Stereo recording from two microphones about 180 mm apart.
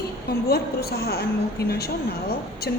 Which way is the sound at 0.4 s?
60° left (ahead or behind).